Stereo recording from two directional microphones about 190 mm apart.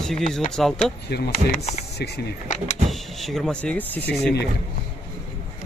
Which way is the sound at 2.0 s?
60° left (ahead or behind).